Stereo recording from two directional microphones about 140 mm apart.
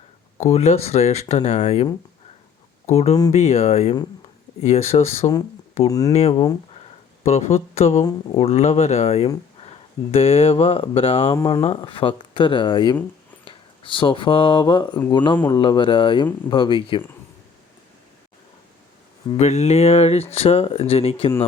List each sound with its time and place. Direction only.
0.3 s speech: 50° left (ahead or behind)
5.9 s speech: 25° left (ahead or behind)
6.1 s speech: 50° left (ahead or behind)
19.4 s speech: 50° left (ahead or behind)